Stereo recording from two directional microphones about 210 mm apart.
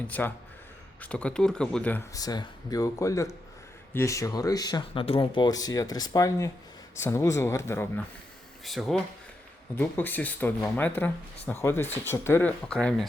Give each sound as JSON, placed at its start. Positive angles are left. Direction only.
{"t": 0.1, "sound": "speech", "side_deg": 10}
{"t": 8.6, "sound": "speech", "side_deg": 0}